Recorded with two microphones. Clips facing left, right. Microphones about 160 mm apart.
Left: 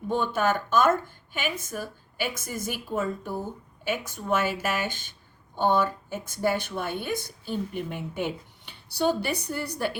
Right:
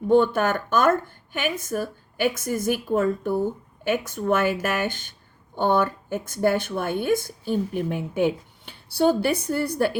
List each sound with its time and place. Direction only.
0.2 s a woman's voice: 50° right (ahead or behind)